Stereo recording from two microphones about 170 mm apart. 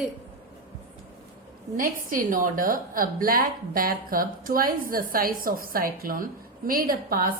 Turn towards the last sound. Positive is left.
turn(degrees=-55)  # may be behind; listen again after turning